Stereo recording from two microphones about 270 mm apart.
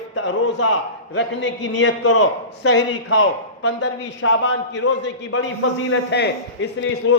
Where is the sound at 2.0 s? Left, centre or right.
Left.